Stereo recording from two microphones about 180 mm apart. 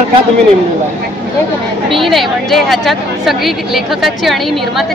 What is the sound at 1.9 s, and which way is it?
A woman's voice, centre (ahead or behind).